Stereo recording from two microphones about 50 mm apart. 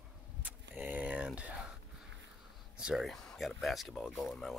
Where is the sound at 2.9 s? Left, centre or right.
Centre.